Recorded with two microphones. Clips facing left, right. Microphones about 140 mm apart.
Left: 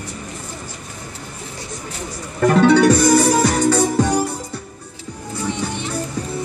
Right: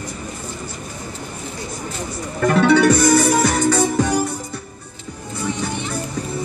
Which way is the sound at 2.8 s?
30° left (ahead or behind).